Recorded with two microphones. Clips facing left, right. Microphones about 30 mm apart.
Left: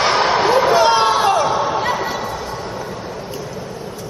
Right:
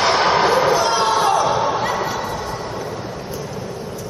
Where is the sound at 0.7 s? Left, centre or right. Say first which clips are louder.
Left 3 dB; left.